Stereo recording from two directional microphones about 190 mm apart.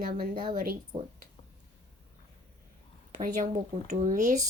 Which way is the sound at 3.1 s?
40° right (ahead or behind).